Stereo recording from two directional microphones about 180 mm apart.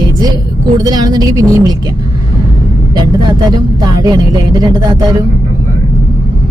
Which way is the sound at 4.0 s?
20° right (ahead or behind).